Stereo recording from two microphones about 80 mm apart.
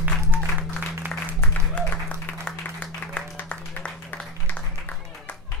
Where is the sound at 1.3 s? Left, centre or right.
Centre.